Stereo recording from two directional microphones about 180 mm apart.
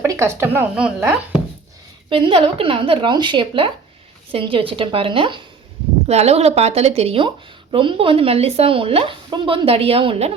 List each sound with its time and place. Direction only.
0.0 s speech: 15° right (ahead or behind)
2.0 s speech: 30° right (ahead or behind)